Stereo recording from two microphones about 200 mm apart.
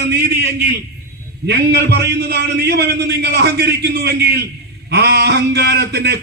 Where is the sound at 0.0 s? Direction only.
55° right (ahead or behind).